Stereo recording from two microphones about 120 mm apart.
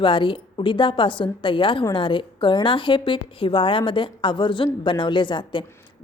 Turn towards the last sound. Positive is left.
turn(degrees=40)  # may be behind; listen again after turning